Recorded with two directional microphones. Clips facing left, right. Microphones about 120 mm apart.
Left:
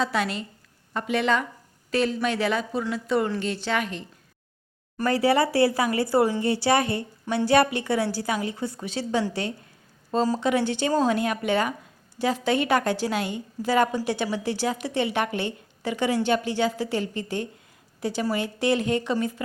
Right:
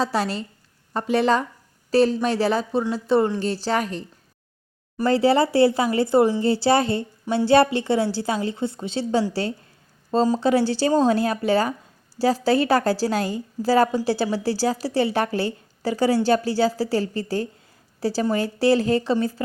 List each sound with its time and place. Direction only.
0.0 s a woman's voice: 35° right (ahead or behind)
5.0 s a woman's voice: 30° right (ahead or behind)
10.3 s a woman's voice: 35° right (ahead or behind)